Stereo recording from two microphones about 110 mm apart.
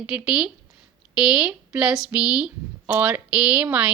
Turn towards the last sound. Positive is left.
turn(degrees=-10)  # may be behind; listen again after turning